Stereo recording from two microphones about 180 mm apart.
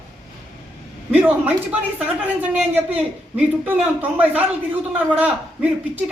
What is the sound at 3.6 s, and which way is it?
A man's voice, 10° right (ahead or behind).